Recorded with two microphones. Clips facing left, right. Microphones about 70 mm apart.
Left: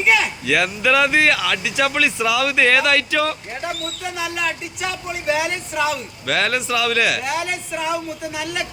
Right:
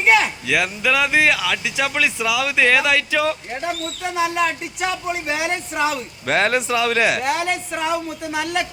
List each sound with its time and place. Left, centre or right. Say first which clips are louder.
0.0 s a sound: right 2 dB; right
0.4 s speech: left 2 dB; centre
4.1 s speech: right 6 dB; right